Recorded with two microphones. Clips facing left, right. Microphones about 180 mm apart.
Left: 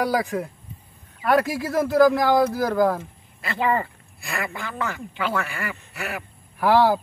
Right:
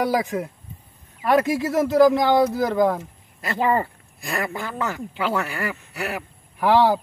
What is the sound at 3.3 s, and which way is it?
A man's voice, 40° right (ahead or behind).